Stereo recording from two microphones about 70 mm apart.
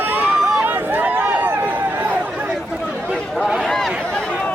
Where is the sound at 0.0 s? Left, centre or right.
Right.